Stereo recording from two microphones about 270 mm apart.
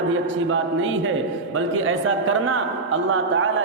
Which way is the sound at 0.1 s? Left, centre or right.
Right.